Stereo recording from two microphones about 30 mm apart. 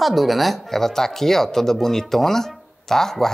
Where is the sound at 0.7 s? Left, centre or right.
Centre.